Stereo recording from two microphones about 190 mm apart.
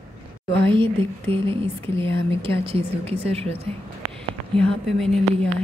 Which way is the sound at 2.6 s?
30° right (ahead or behind).